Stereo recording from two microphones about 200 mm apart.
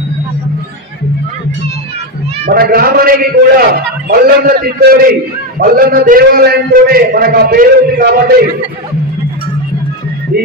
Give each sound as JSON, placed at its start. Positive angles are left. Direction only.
{"t": 2.4, "sound": "a man's voice", "side_deg": -45}